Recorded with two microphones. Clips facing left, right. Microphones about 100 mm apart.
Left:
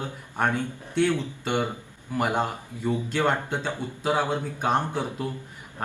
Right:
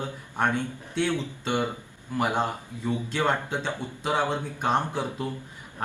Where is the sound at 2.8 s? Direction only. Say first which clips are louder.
Left 2 dB; centre (ahead or behind).